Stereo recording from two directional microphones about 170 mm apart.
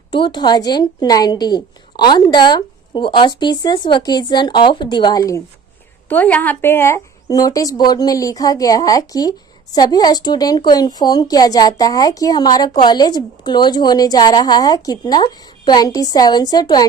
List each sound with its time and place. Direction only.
0.1 s a woman's voice: 25° left (ahead or behind)
6.0 s a woman's voice: 10° left (ahead or behind); by 16.8 s 25° left (ahead or behind)